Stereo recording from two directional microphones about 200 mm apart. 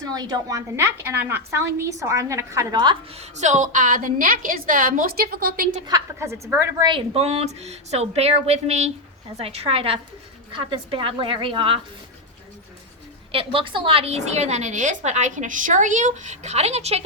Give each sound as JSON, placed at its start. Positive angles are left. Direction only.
{"t": 0.1, "sound": "a woman's voice", "side_deg": -20}
{"t": 5.8, "sound": "a woman's voice", "side_deg": -15}
{"t": 13.3, "sound": "a woman's voice", "side_deg": -25}